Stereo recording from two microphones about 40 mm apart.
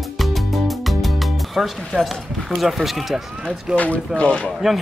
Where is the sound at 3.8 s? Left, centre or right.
Left.